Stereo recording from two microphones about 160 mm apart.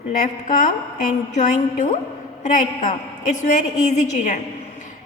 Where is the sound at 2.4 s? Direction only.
50° left (ahead or behind).